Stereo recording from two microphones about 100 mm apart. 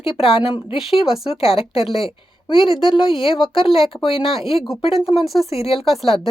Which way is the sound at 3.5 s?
65° left (ahead or behind).